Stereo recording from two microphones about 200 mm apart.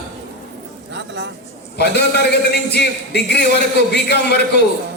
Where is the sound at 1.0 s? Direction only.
60° right (ahead or behind).